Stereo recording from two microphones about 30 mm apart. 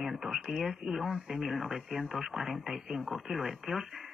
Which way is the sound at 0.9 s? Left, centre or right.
Centre.